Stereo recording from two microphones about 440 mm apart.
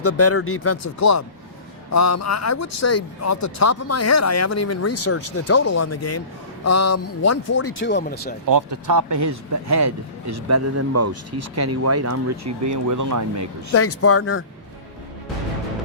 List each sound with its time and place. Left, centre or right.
0.0 s a man's voice: left
8.4 s a man's voice: right
13.7 s a man's voice: left